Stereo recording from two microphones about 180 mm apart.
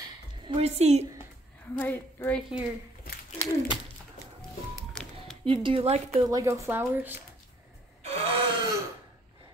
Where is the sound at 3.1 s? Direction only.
55° left (ahead or behind).